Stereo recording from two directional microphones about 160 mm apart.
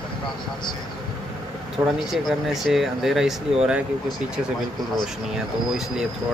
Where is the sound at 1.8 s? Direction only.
15° right (ahead or behind).